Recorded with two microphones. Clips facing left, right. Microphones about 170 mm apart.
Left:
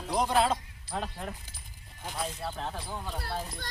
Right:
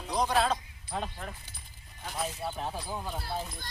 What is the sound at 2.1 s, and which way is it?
Speech, 10° right (ahead or behind).